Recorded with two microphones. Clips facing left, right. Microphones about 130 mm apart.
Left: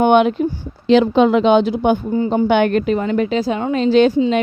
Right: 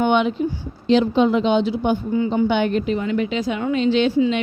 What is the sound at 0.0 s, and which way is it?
Speech, 50° left (ahead or behind).